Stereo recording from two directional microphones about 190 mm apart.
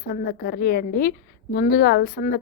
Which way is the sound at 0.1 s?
55° left (ahead or behind).